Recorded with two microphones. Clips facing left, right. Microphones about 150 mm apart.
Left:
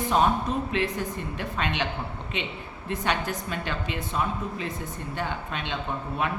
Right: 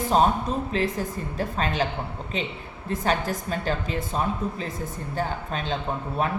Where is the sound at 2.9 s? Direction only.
40° right (ahead or behind).